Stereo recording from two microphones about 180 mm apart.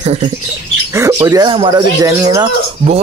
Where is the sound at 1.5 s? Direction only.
25° right (ahead or behind).